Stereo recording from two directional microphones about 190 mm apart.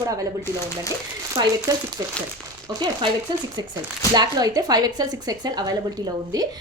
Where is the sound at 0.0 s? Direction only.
20° right (ahead or behind).